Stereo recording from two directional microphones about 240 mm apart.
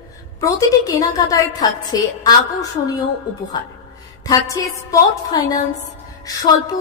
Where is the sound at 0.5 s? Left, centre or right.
Centre.